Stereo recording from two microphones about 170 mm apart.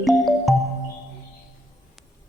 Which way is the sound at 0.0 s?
Centre (ahead or behind).